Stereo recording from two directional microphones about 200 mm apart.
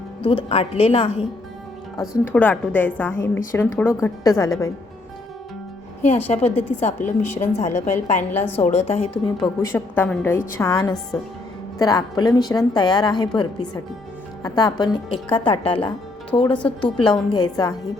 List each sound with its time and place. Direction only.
0.3 s a woman's voice: 30° left (ahead or behind)
2.0 s a woman's voice: 10° left (ahead or behind)
6.0 s a woman's voice: 30° left (ahead or behind)
8.3 s a woman's voice: 10° left (ahead or behind)
8.6 s a woman's voice: 35° left (ahead or behind)
9.6 s a woman's voice: 10° left (ahead or behind)